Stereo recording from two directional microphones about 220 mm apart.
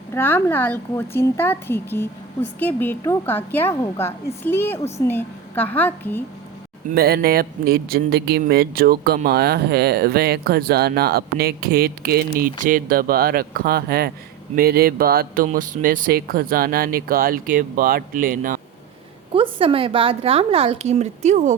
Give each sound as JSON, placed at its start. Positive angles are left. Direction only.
{"t": 0.1, "sound": "a woman's voice", "side_deg": 10}
{"t": 6.9, "sound": "speech", "side_deg": -45}
{"t": 19.3, "sound": "a woman's voice", "side_deg": -25}